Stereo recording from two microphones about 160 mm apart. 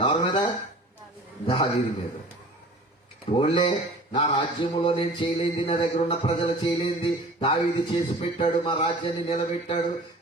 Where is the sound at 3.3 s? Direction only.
30° left (ahead or behind).